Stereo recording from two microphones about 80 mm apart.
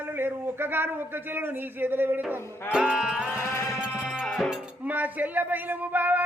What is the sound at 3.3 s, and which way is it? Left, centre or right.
Music, left.